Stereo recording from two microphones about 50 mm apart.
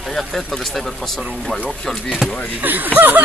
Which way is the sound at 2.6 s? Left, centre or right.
Right.